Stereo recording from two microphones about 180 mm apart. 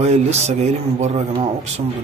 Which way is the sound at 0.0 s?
35° right (ahead or behind).